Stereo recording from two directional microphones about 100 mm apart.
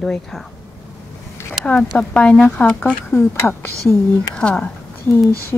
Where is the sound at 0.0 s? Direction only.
5° left (ahead or behind).